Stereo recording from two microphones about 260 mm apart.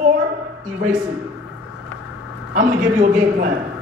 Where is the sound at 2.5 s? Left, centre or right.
Right.